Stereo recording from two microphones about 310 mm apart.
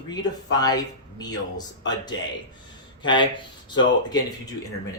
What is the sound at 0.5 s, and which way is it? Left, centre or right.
Speech, centre.